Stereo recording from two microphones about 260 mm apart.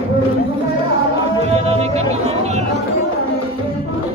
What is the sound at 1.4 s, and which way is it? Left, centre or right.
Music, right.